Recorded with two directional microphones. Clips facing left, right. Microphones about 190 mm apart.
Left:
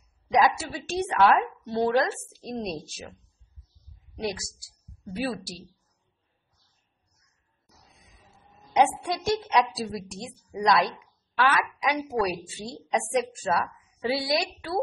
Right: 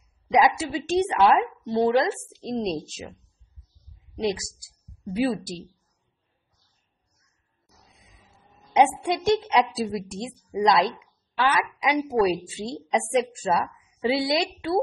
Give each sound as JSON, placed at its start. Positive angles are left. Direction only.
{"t": 0.3, "sound": "a woman's voice", "side_deg": -20}
{"t": 4.2, "sound": "a woman's voice", "side_deg": -20}
{"t": 8.7, "sound": "a woman's voice", "side_deg": -25}